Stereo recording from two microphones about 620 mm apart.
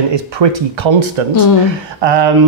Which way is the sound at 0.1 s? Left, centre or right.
Right.